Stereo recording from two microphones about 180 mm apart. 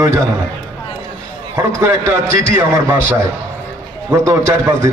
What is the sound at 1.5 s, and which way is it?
A man's voice, 15° right (ahead or behind).